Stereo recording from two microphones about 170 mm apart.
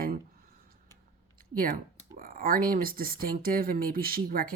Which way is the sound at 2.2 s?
55° right (ahead or behind).